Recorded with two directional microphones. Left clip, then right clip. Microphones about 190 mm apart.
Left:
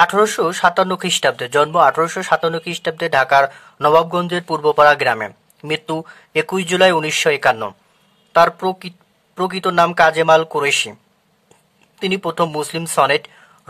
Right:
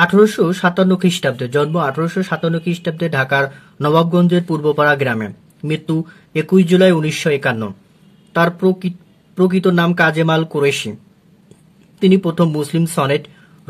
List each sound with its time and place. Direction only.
0.0 s speech: 30° left (ahead or behind)
12.0 s speech: 25° left (ahead or behind)